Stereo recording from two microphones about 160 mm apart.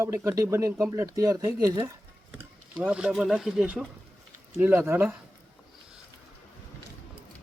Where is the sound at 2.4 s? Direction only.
10° right (ahead or behind).